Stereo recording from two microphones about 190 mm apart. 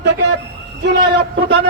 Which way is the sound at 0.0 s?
65° right (ahead or behind).